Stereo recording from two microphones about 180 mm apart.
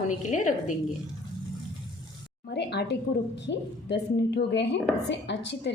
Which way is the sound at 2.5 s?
65° left (ahead or behind).